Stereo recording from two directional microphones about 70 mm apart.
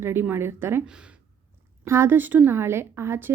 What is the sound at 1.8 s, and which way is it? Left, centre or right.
A woman's voice, right.